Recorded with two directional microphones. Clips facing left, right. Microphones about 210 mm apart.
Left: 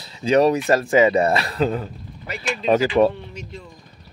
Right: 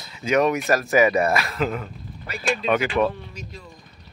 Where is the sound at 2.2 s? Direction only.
30° left (ahead or behind).